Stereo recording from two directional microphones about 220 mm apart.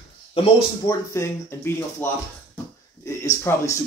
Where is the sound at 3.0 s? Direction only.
15° left (ahead or behind).